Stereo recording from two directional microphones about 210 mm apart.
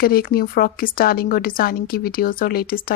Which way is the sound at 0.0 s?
45° left (ahead or behind).